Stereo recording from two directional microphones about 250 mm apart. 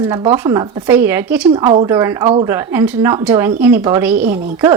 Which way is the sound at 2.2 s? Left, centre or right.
Right.